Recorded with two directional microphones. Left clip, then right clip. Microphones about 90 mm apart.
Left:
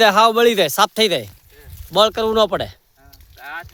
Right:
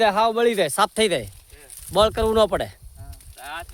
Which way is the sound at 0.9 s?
20° left (ahead or behind).